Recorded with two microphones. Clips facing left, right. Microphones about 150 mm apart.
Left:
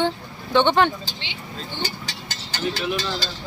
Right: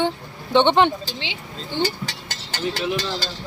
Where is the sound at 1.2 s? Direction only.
90° right.